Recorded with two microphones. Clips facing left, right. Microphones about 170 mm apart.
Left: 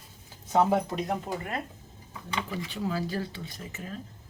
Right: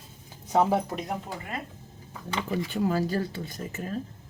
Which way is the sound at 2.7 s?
45° right (ahead or behind).